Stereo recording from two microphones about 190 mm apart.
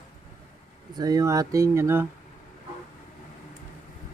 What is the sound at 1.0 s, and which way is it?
Speech, 20° right (ahead or behind).